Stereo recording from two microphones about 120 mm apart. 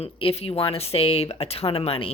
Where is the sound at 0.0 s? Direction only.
55° left (ahead or behind).